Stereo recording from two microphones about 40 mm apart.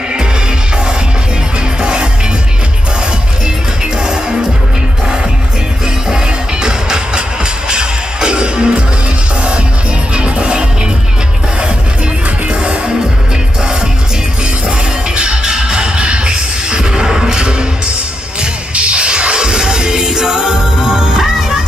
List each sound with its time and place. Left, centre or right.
1.8 s music: right
4.0 s music: centre
6.0 s music: centre
10.3 s music: right
12.4 s music: right
15.1 s music: right
21.2 s music: centre